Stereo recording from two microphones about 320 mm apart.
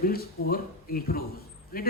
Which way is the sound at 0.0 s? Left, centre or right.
Left.